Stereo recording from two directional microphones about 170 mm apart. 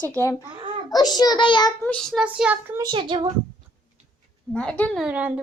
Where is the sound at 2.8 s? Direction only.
30° right (ahead or behind).